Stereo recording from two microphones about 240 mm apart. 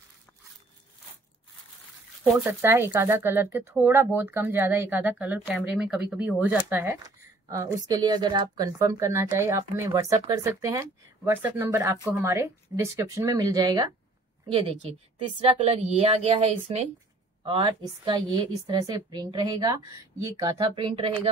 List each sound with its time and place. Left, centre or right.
2.3 s a woman's voice: centre